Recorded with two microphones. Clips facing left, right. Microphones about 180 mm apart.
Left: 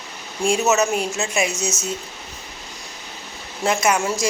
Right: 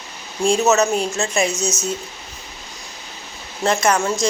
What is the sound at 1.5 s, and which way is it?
Speech, 25° left (ahead or behind).